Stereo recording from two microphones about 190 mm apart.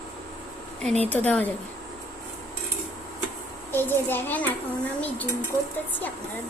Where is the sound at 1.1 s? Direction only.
10° left (ahead or behind).